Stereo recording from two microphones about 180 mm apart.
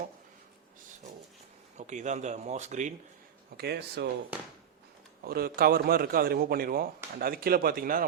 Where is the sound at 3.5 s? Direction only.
65° right (ahead or behind).